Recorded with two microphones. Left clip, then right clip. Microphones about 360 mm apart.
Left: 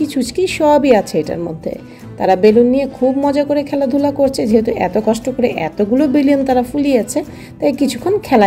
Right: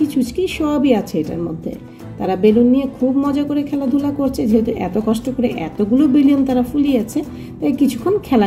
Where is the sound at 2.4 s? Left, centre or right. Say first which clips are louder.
Left 1 dB; left.